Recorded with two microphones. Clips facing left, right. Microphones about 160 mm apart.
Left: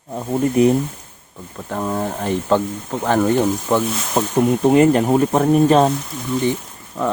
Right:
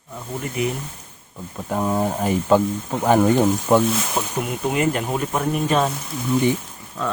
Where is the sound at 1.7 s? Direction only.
10° right (ahead or behind).